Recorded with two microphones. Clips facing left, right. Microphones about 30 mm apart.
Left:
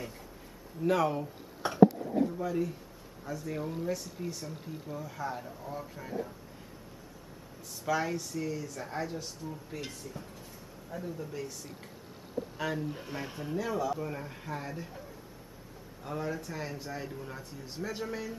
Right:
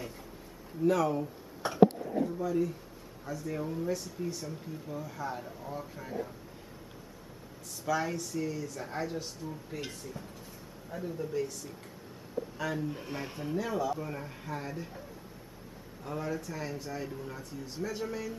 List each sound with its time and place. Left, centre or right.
0.8 s speech: centre
7.8 s speech: centre
12.7 s speech: centre